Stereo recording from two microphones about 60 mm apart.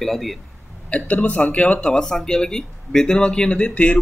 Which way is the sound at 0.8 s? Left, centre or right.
Left.